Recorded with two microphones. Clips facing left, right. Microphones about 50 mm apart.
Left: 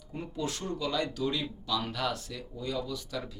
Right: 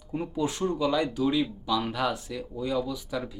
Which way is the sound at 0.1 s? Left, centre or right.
Centre.